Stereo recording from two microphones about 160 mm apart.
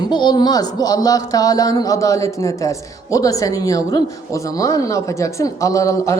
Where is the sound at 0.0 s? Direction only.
25° left (ahead or behind).